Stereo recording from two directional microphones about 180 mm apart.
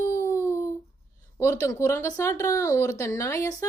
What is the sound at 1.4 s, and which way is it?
A woman's voice, 15° left (ahead or behind).